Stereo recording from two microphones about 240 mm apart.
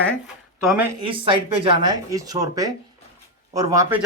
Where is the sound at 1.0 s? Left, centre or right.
Right.